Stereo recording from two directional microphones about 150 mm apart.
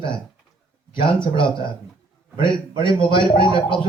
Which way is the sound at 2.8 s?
35° left (ahead or behind).